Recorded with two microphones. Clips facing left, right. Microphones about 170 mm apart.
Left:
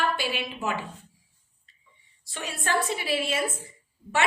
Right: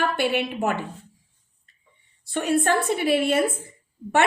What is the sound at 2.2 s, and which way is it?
A woman's voice, 60° right (ahead or behind).